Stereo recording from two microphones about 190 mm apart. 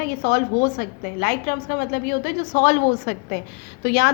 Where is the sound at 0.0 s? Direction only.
50° left (ahead or behind).